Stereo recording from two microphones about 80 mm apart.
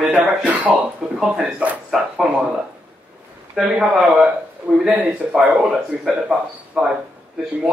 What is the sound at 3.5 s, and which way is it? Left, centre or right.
Speech, centre.